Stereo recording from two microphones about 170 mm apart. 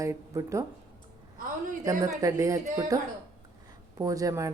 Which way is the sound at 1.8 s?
20° right (ahead or behind).